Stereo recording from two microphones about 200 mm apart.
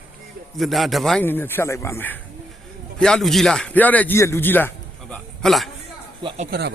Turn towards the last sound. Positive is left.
turn(degrees=-35)  # may be behind; listen again after turning